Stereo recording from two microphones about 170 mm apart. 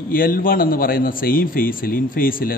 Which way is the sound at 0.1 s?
55° left (ahead or behind).